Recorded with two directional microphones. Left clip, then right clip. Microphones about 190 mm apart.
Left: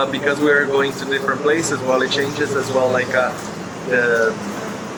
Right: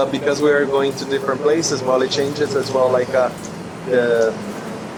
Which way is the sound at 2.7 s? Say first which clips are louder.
Right 1 dB; 10° right (ahead or behind).